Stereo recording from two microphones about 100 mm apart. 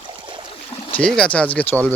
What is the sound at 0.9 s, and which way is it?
Speech, 10° left (ahead or behind).